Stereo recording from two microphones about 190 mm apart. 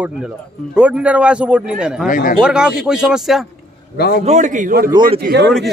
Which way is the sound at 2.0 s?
45° left (ahead or behind).